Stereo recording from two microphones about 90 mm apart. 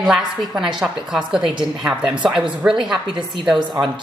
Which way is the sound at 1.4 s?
65° right (ahead or behind).